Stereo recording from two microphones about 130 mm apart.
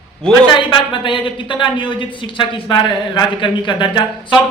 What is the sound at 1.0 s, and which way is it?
Speech, 40° left (ahead or behind).